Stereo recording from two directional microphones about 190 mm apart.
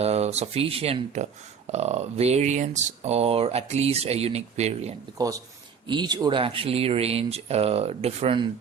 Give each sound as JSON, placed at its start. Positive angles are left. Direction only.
{"t": 0.0, "sound": "speech", "side_deg": -35}
{"t": 5.1, "sound": "speech", "side_deg": -20}